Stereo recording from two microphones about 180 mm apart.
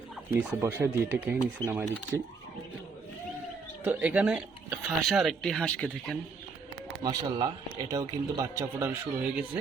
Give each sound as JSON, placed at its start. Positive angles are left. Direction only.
{"t": 0.3, "sound": "speech", "side_deg": -15}
{"t": 3.8, "sound": "speech", "side_deg": -5}
{"t": 7.0, "sound": "a man's voice", "side_deg": -20}